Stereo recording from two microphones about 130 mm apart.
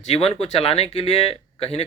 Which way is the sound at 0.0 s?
50° left (ahead or behind).